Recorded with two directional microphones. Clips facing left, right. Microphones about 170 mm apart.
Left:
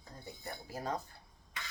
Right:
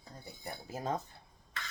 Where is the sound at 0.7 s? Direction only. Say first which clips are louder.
Right 2 dB; 20° right (ahead or behind).